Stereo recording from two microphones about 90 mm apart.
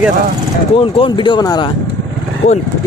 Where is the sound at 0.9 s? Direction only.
60° left (ahead or behind).